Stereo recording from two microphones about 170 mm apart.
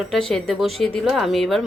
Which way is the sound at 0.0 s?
Centre (ahead or behind).